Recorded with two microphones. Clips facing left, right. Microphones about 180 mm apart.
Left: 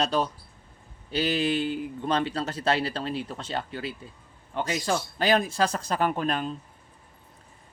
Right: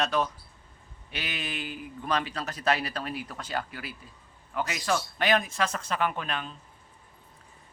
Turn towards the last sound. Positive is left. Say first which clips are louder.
# left 5 dB
turn(degrees=40)  # may be behind; listen again after turning